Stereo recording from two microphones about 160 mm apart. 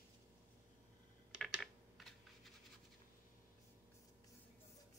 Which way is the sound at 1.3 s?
Centre (ahead or behind).